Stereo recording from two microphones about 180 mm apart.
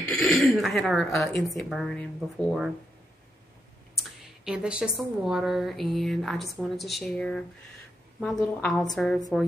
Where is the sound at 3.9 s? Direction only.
Centre (ahead or behind).